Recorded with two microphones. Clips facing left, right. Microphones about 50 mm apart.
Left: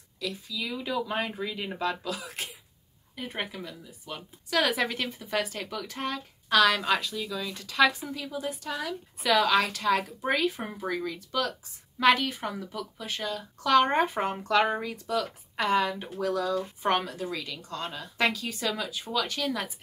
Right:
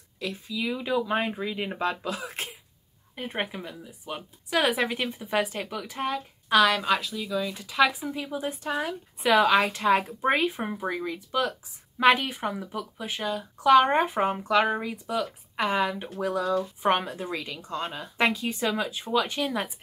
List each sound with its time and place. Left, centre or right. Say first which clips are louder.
0.2 s a woman's voice: right 3 dB; right; by 8.1 s centre
8.1 s a woman's voice: right 2 dB; right